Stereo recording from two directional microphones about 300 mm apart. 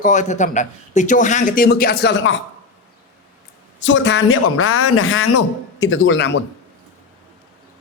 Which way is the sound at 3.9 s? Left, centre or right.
Left.